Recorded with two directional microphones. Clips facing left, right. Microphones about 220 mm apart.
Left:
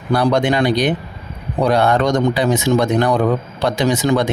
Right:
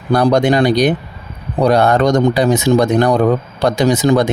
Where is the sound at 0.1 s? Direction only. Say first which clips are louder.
Right 3 dB; 40° right (ahead or behind).